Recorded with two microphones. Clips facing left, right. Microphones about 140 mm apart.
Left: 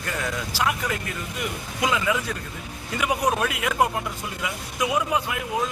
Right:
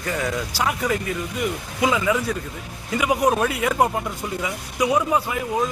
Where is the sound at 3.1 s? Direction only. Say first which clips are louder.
Right 4 dB; 25° right (ahead or behind).